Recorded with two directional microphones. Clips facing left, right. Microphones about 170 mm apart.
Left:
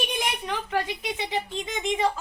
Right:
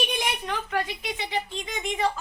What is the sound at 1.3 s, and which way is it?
Speech, 20° left (ahead or behind).